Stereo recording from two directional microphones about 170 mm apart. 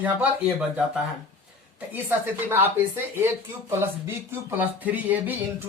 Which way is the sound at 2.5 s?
15° right (ahead or behind).